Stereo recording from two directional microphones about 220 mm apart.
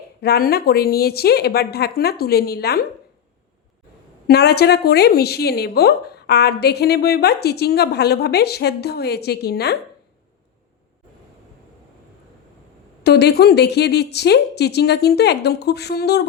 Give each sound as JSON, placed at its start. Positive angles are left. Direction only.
{"t": 0.2, "sound": "a woman's voice", "side_deg": 45}
{"t": 4.3, "sound": "a woman's voice", "side_deg": 45}
{"t": 13.0, "sound": "a woman's voice", "side_deg": 50}